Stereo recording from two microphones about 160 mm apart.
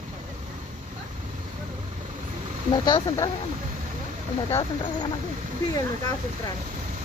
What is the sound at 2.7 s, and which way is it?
Speech, 25° left (ahead or behind).